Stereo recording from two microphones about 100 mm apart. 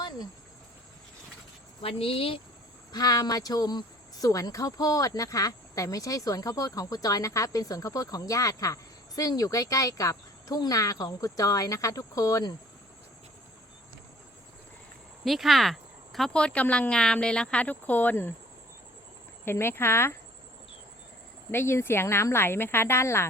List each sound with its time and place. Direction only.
1.8 s speech: 75° left (ahead or behind)
2.9 s speech: 40° left (ahead or behind)
15.2 s speech: centre (ahead or behind); by 18.3 s 20° left (ahead or behind)
19.5 s speech: 25° left (ahead or behind)
21.5 s speech: 25° left (ahead or behind)